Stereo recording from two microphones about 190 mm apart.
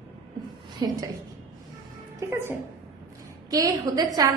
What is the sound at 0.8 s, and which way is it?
Speech, 20° right (ahead or behind).